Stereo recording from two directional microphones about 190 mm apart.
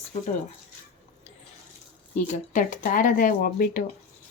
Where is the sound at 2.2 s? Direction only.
40° left (ahead or behind).